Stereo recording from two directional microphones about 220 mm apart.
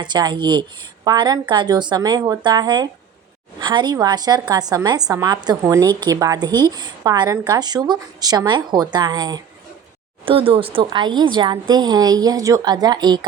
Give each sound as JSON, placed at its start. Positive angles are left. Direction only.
{"t": 0.0, "sound": "a woman's voice", "side_deg": -20}